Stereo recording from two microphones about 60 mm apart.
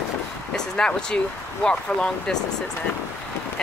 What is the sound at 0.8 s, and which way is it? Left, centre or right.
Speech, centre.